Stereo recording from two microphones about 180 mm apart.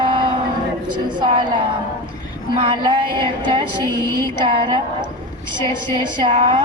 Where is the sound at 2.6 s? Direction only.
25° right (ahead or behind).